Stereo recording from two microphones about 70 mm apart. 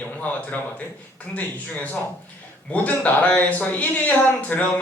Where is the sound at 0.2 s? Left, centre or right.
Left.